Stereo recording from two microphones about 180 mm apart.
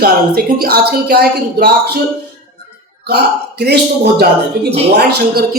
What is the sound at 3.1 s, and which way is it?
Speech, 65° right (ahead or behind).